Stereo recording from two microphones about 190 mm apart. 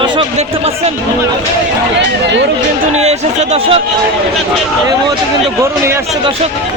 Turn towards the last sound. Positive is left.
turn(degrees=-15)  # may be behind; listen again after turning